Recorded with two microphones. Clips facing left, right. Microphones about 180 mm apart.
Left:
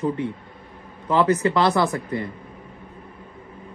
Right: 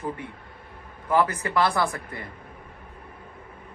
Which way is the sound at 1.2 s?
25° left (ahead or behind).